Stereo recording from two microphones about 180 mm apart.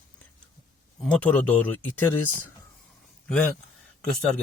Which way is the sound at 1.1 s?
5° left (ahead or behind).